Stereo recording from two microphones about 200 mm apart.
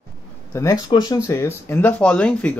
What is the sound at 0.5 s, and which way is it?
Speech, 15° left (ahead or behind).